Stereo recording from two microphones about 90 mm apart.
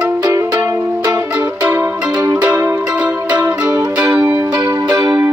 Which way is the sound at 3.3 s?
45° right (ahead or behind).